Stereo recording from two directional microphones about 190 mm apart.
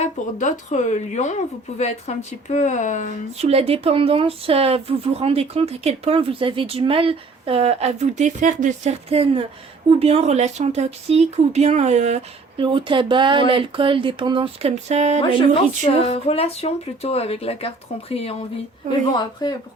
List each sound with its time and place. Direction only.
0.0 s speech: 40° left (ahead or behind)
3.3 s speech: 30° right (ahead or behind)
15.4 s speech: 30° left (ahead or behind)
19.2 s speech: 20° left (ahead or behind)